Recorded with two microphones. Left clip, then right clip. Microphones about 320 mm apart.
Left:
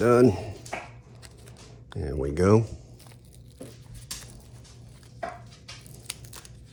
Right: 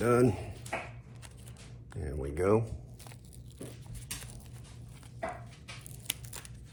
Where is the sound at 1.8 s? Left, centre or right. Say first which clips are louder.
Left 9 dB; left.